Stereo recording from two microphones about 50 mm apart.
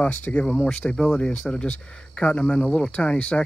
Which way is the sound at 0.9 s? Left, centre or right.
Centre.